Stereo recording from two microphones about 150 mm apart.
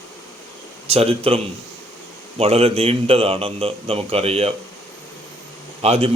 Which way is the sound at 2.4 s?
40° right (ahead or behind).